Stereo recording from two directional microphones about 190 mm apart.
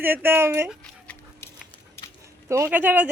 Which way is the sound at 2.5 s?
15° right (ahead or behind).